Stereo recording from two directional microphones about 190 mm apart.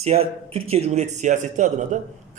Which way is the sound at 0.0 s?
30° right (ahead or behind).